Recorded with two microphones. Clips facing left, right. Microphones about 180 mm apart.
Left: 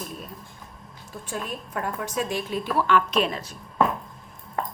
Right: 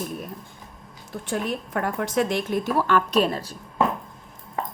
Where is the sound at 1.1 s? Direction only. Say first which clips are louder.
Right 6 dB; 70° right (ahead or behind).